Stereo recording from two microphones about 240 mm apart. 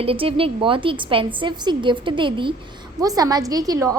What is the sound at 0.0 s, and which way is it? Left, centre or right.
A woman's voice, right.